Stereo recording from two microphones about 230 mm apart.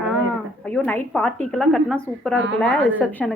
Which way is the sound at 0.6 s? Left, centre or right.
Centre.